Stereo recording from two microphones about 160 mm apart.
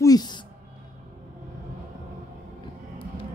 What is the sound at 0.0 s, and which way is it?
Music, 25° left (ahead or behind).